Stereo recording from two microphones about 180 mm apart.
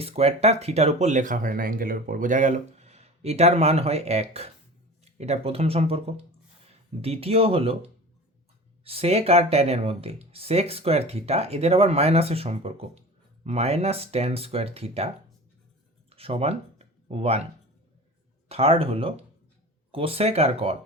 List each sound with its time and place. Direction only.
0.0 s speech: 35° right (ahead or behind)
16.0 s a sound: 30° right (ahead or behind)
18.4 s speech: 35° right (ahead or behind)